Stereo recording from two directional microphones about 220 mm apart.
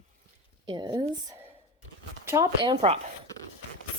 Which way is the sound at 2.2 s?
15° right (ahead or behind).